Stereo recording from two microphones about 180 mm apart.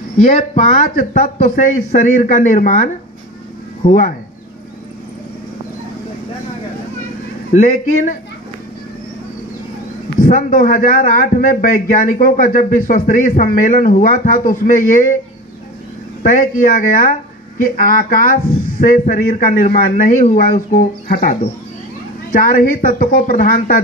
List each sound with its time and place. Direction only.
0.2 s speech: 45° left (ahead or behind)
7.5 s speech: 45° left (ahead or behind)
10.2 s speech: 50° left (ahead or behind)
16.2 s speech: 45° left (ahead or behind)